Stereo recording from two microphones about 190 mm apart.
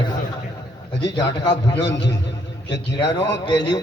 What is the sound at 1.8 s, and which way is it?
A man's voice, 65° left (ahead or behind).